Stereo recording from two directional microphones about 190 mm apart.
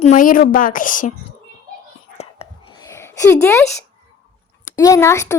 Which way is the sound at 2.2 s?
35° left (ahead or behind).